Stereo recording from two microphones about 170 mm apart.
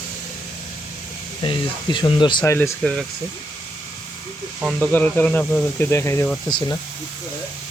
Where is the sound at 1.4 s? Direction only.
30° left (ahead or behind).